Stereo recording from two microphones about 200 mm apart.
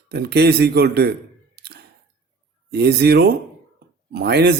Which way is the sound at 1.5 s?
55° right (ahead or behind).